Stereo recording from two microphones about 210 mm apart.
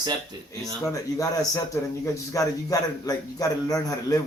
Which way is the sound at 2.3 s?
15° left (ahead or behind).